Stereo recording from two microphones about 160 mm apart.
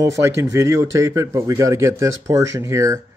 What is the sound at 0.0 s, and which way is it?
Speech, 20° right (ahead or behind).